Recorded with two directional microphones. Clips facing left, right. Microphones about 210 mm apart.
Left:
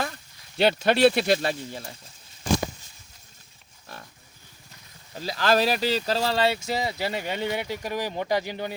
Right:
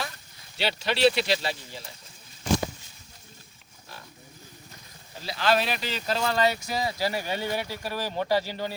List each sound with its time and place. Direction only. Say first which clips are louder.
0.5 s speech: left 8 dB; 50° left (ahead or behind)
5.2 s speech: left 3 dB; 40° left (ahead or behind); by 8.7 s 15° left (ahead or behind)